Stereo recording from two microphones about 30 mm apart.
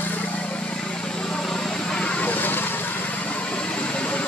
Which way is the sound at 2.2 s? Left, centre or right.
Left.